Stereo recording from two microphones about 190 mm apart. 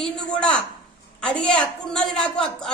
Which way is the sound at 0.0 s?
5° left (ahead or behind).